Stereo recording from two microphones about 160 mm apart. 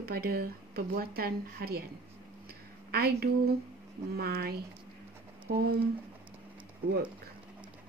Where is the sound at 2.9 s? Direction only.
75° right (ahead or behind).